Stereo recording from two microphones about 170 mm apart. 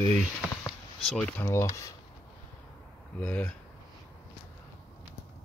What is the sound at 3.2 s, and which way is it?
Speech, 5° left (ahead or behind).